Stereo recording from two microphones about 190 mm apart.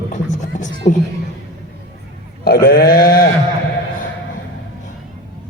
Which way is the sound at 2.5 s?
55° left (ahead or behind).